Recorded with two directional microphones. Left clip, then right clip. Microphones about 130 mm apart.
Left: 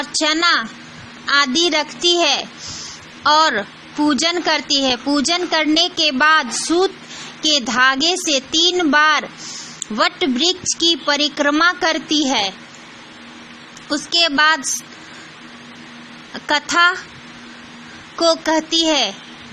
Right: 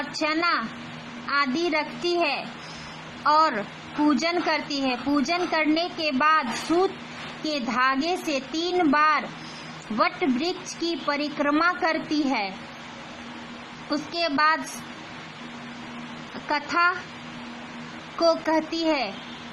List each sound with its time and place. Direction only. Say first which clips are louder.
0.1 s a woman's voice: left 9 dB; 30° left (ahead or behind)
7.4 s a woman's voice: left 9 dB; 30° left (ahead or behind)
13.9 s speech: left 9 dB; 25° left (ahead or behind)
16.5 s a woman's voice: left 8 dB; 30° left (ahead or behind)
18.2 s speech: left 6 dB; 25° left (ahead or behind)